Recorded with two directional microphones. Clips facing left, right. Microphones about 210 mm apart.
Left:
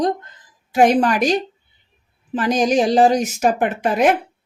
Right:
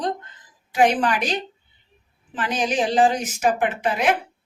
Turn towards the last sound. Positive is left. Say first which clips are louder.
# left 5 dB
turn(degrees=45)  # may be behind; listen again after turning